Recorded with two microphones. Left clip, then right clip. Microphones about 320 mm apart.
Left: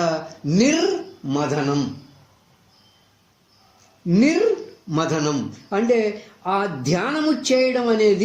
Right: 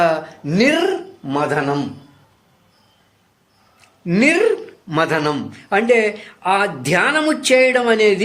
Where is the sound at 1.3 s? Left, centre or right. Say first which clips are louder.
Right 4 dB; right.